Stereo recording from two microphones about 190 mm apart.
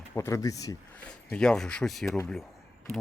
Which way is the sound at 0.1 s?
15° left (ahead or behind).